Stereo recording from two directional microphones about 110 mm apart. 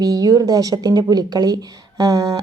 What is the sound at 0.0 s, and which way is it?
A woman's voice, 35° right (ahead or behind).